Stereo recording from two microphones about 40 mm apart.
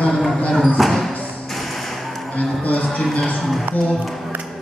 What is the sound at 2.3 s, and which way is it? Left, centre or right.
Speech, left.